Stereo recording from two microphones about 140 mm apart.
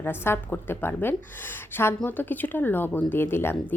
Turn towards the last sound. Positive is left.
turn(degrees=15)  # may be behind; listen again after turning